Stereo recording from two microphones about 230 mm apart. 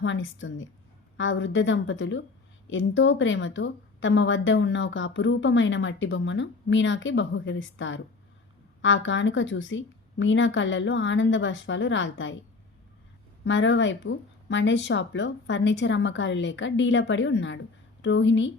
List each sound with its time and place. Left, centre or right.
0.0 s a woman's voice: left
13.4 s speech: left